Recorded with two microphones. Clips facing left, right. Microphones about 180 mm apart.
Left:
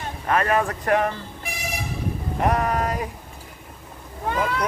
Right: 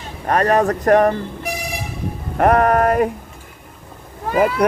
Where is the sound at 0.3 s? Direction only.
40° right (ahead or behind).